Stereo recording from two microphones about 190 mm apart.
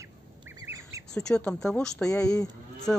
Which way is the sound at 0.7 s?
10° right (ahead or behind).